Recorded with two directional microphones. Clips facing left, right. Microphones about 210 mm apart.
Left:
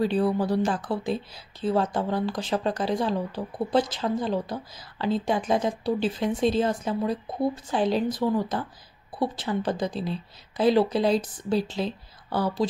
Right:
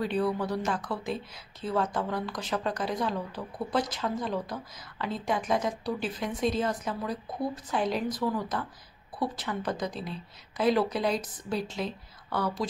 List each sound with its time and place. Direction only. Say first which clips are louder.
0.0 s speech: left 5 dB; 30° left (ahead or behind)